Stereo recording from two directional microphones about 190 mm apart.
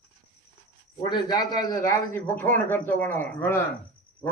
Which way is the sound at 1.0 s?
20° left (ahead or behind).